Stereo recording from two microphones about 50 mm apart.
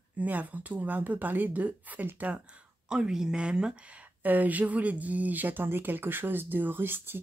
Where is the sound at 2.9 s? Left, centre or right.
Centre; by 7.2 s right.